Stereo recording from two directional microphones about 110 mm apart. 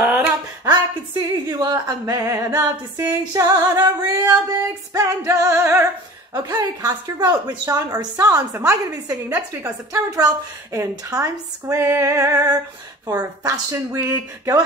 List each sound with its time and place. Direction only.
0.7 s a woman's voice: 40° right (ahead or behind); by 5.9 s 25° right (ahead or behind)
6.3 s a woman's voice: 35° right (ahead or behind)